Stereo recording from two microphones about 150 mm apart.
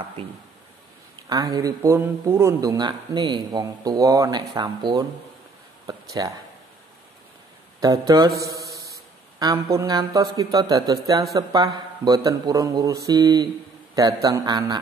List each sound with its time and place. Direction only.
1.3 s speech: 25° right (ahead or behind)
7.8 s speech: 25° right (ahead or behind)